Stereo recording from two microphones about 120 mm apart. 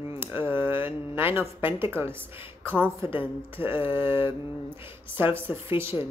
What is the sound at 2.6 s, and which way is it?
Speech, 20° right (ahead or behind).